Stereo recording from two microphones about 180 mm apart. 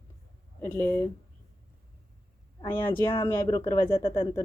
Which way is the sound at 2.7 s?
10° left (ahead or behind).